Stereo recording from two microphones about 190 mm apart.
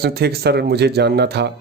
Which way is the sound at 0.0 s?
55° right (ahead or behind).